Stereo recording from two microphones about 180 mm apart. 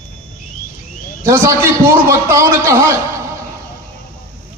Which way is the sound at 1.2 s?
15° right (ahead or behind).